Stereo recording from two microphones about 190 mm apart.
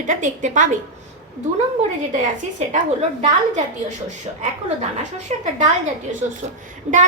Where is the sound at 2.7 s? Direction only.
40° right (ahead or behind).